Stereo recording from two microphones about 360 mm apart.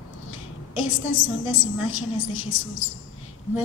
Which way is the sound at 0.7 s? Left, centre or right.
Left.